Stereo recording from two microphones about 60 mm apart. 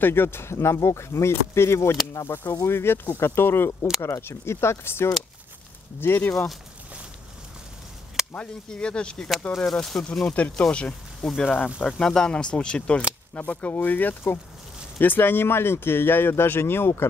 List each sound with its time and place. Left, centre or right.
0.0 s speech: left
2.2 s speech: left
8.2 s a sound: centre
8.6 s speech: centre
12.0 s speech: centre; by 17.1 s left